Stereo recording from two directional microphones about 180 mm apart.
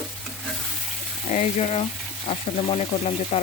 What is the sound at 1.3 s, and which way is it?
Speech, 40° left (ahead or behind).